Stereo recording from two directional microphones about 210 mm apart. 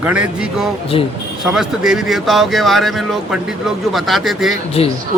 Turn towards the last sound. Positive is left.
turn(degrees=30)  # may be behind; listen again after turning